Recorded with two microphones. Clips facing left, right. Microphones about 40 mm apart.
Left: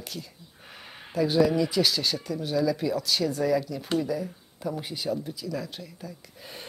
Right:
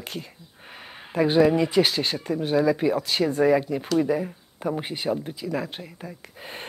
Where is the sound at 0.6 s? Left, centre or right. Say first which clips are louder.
Right 3 dB; right.